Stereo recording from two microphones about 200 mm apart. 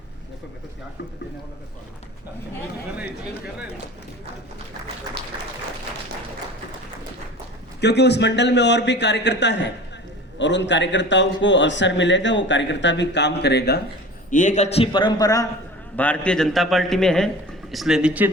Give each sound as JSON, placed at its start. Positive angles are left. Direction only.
{"t": 7.8, "sound": "a man's voice", "side_deg": 60}
{"t": 14.3, "sound": "a man's voice", "side_deg": 40}
{"t": 16.0, "sound": "a man's voice", "side_deg": 5}